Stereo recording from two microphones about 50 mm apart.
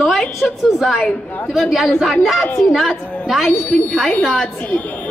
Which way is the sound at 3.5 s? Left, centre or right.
Left.